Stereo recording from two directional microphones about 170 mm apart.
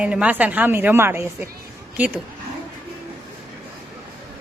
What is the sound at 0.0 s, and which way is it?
A woman's voice, 5° right (ahead or behind).